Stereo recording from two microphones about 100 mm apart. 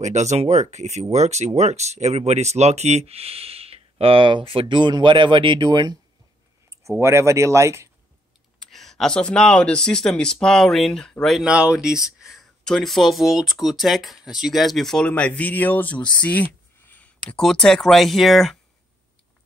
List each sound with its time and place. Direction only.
1.2 s speech: 90° right; by 5.9 s 50° right (ahead or behind)
7.0 s speech: 30° right (ahead or behind)
8.5 s speech: 5° left (ahead or behind)
16.8 s a sound: 15° left (ahead or behind)
17.4 s speech: 5° left (ahead or behind)